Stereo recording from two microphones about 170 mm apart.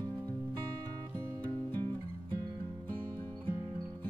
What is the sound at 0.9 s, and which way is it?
Music, 20° right (ahead or behind).